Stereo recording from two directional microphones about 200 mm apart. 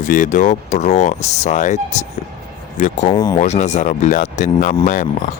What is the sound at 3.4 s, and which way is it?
Speech, 35° left (ahead or behind).